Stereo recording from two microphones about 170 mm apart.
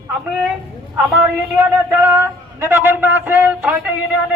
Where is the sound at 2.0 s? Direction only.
15° right (ahead or behind).